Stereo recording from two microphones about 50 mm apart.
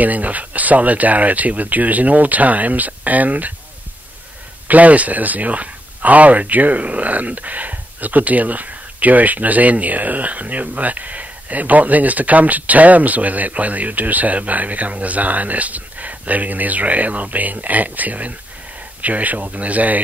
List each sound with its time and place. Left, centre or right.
0.0 s speech: right
4.6 s speech: right